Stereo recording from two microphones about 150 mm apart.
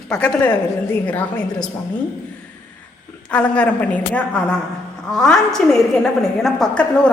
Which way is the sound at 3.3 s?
10° left (ahead or behind).